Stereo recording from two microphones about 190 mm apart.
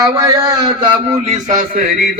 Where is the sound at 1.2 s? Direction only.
35° right (ahead or behind).